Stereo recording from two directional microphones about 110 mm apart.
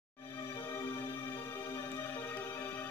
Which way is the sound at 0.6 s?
25° left (ahead or behind).